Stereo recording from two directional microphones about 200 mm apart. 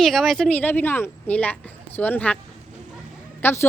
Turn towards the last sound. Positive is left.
turn(degrees=10)  # may be behind; listen again after turning